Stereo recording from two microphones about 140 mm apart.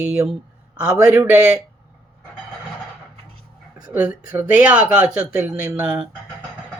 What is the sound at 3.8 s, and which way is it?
Speech, 10° right (ahead or behind).